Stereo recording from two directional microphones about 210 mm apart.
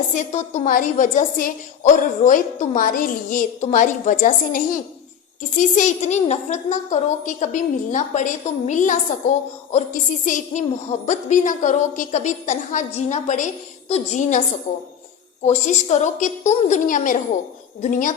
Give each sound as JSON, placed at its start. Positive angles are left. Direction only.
{"t": 0.1, "sound": "a woman's voice", "side_deg": 35}
{"t": 15.4, "sound": "a woman's voice", "side_deg": 35}